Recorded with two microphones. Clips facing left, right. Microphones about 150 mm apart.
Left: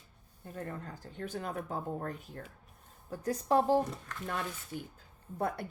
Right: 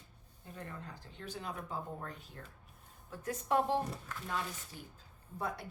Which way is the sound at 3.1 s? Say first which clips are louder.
Left 4 dB; 35° left (ahead or behind).